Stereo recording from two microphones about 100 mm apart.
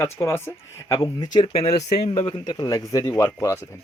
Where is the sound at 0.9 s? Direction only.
45° left (ahead or behind).